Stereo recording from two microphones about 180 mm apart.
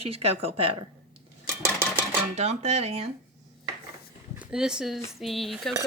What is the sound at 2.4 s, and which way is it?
Speech, 35° right (ahead or behind).